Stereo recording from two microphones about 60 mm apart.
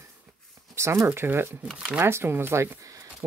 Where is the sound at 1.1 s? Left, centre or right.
Right.